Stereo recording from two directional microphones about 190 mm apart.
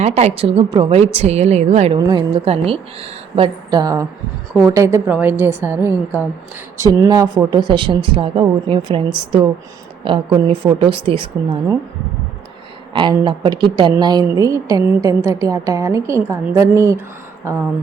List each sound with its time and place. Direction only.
0.0 s a woman's voice: 35° right (ahead or behind)
2.0 s a woman's voice: 25° right (ahead or behind)
12.9 s a woman's voice: 25° right (ahead or behind)